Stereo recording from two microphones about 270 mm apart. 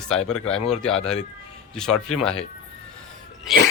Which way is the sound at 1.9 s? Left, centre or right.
Left.